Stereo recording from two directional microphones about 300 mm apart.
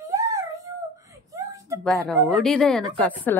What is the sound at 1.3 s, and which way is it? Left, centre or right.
Whimper, centre.